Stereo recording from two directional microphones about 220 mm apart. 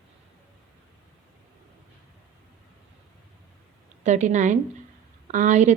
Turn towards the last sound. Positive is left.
turn(degrees=-30)  # may be behind; listen again after turning